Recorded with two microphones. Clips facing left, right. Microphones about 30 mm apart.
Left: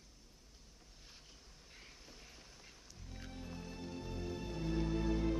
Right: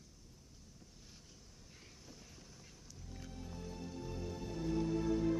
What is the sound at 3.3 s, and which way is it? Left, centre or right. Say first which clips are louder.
Music: even; left.